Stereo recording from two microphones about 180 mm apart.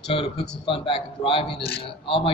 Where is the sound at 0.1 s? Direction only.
35° left (ahead or behind).